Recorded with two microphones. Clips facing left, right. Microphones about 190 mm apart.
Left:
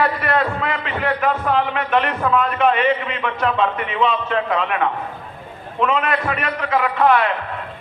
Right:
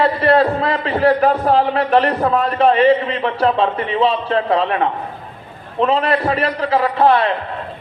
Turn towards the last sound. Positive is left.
turn(degrees=-30)  # may be behind; listen again after turning